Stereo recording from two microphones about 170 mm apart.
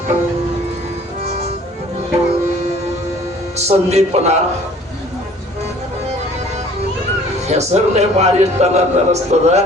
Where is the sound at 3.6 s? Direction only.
40° right (ahead or behind).